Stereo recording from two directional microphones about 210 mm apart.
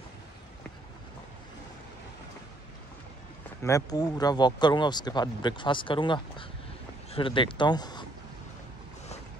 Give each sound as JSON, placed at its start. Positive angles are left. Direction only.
{"t": 3.6, "sound": "speech", "side_deg": 15}